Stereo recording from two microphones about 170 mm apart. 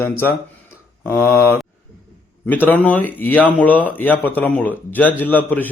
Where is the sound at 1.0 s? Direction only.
15° left (ahead or behind).